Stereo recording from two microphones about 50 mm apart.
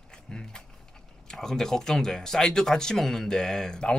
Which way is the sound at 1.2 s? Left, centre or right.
Centre.